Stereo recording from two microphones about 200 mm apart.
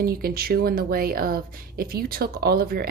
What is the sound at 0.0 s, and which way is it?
A woman's voice, 50° right (ahead or behind).